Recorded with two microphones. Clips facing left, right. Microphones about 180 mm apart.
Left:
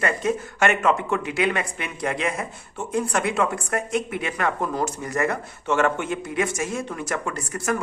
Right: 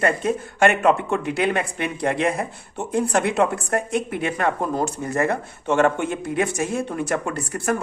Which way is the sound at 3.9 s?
55° right (ahead or behind).